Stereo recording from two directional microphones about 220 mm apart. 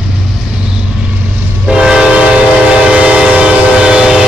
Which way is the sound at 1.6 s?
5° right (ahead or behind).